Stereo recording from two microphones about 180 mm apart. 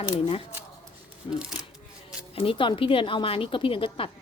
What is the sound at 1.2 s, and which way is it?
A woman's voice, 30° left (ahead or behind).